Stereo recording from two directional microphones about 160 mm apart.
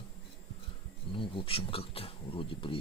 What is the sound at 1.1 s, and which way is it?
Speech, 35° left (ahead or behind).